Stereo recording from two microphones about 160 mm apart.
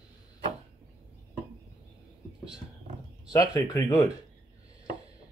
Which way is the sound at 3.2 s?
25° left (ahead or behind).